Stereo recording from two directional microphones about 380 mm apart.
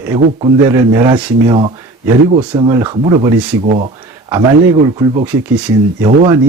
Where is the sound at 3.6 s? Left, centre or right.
Centre.